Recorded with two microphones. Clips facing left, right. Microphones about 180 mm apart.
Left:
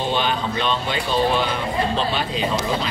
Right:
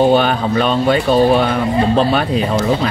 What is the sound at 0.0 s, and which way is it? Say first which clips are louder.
Speech: right 10 dB; 55° right (ahead or behind).